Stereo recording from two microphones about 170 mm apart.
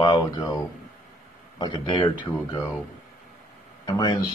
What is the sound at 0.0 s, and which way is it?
Speech, 25° left (ahead or behind).